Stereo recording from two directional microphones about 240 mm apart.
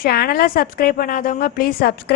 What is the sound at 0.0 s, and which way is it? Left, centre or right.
A woman's voice, left.